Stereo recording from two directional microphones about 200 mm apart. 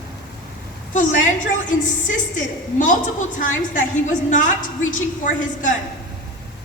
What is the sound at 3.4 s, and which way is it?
A woman's voice, 40° left (ahead or behind).